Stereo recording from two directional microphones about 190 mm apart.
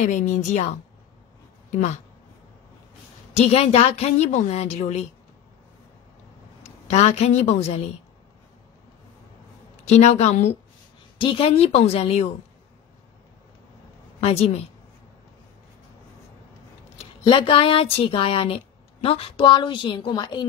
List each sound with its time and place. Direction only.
0.0 s a woman's voice: 40° left (ahead or behind)
3.3 s a woman's voice: 30° left (ahead or behind)
6.6 s a man's voice: 35° left (ahead or behind)
9.8 s a woman's voice: 35° left (ahead or behind)
14.2 s a woman's voice: 30° left (ahead or behind)
17.0 s speech: 25° left (ahead or behind)